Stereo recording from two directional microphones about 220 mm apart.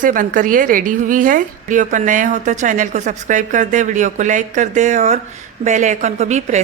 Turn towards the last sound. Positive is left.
turn(degrees=-30)  # may be behind; listen again after turning